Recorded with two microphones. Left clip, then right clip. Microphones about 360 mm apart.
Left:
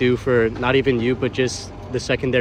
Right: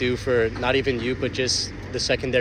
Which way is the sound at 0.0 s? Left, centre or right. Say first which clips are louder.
Left 4 dB; centre.